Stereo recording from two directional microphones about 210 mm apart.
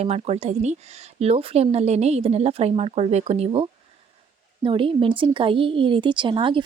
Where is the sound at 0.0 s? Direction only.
30° right (ahead or behind).